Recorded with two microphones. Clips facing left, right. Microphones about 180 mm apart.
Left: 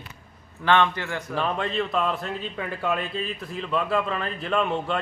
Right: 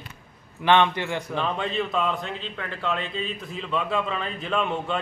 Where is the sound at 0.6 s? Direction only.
20° right (ahead or behind).